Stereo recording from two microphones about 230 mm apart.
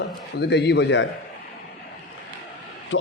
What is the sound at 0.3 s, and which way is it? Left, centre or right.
Speech, left.